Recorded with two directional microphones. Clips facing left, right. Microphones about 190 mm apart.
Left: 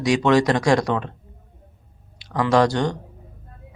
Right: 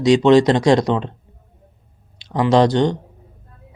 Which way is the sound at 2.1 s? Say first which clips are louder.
Right 3 dB; 25° right (ahead or behind).